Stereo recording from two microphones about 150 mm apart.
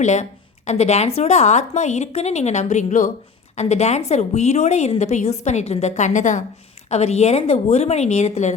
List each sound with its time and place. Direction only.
0.0 s a woman's voice: 50° left (ahead or behind)